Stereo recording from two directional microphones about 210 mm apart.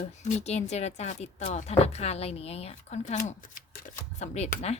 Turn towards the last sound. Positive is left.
turn(degrees=35)  # may be behind; listen again after turning